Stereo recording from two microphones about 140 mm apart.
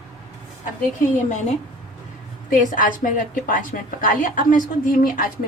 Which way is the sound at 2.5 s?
75° left (ahead or behind).